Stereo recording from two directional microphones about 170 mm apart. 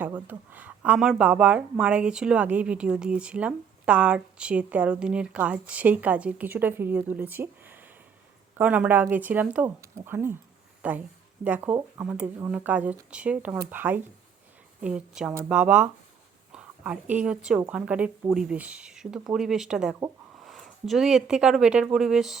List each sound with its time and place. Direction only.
0.0 s speech: 10° right (ahead or behind)